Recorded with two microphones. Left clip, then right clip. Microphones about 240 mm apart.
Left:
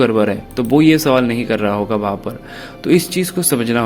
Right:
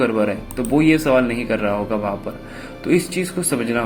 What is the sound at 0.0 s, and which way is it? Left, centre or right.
Speech, left.